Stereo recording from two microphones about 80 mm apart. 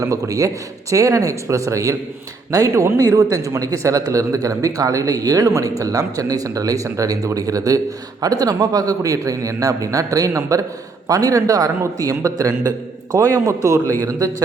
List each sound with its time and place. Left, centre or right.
0.0 s speech: right